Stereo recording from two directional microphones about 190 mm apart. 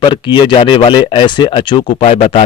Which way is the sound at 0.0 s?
25° left (ahead or behind).